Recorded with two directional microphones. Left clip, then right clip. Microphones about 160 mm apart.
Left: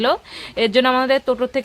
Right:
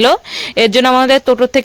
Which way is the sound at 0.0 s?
55° right (ahead or behind).